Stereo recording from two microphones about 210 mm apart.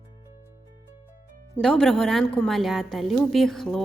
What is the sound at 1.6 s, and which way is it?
Speech, 5° left (ahead or behind).